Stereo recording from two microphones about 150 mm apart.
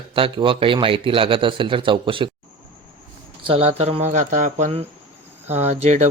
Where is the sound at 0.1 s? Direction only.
35° right (ahead or behind).